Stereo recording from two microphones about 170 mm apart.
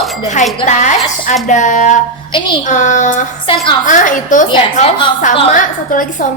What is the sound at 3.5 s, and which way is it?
Speech, 30° left (ahead or behind).